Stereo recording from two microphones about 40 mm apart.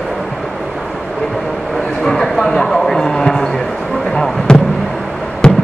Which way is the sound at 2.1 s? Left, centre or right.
Centre.